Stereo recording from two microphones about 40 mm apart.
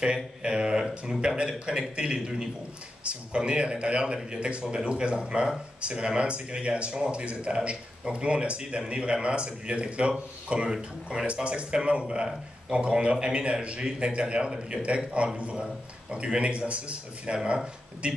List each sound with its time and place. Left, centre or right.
0.0 s speech: right
10.7 s speech: centre
11.4 s speech: right